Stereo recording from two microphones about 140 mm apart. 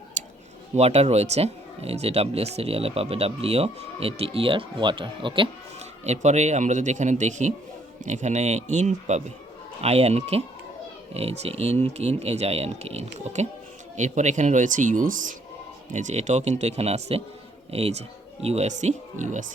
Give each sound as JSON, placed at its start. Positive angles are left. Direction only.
{"t": 0.2, "sound": "tick-tock", "side_deg": -65}
{"t": 0.8, "sound": "speech", "side_deg": -50}
{"t": 6.1, "sound": "a man's voice", "side_deg": -55}
{"t": 15.9, "sound": "a man's voice", "side_deg": -60}